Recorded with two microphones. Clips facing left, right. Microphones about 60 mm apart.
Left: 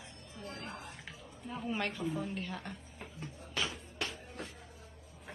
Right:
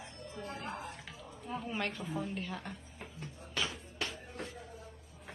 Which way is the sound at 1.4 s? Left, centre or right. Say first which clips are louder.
Right 1 dB; centre.